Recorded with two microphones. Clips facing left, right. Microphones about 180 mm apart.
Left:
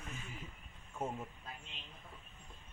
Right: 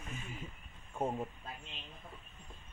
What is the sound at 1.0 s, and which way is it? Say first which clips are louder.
Speech: right 5 dB; 35° right (ahead or behind).